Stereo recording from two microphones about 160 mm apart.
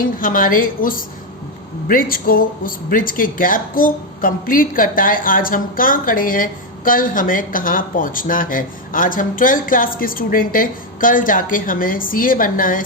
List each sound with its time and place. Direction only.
0.2 s speech: 60° left (ahead or behind)